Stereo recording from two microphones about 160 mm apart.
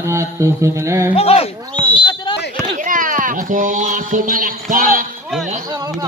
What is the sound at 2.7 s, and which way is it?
Speech, 55° right (ahead or behind).